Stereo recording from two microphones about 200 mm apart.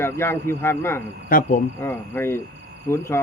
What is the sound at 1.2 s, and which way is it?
Speech, 45° left (ahead or behind).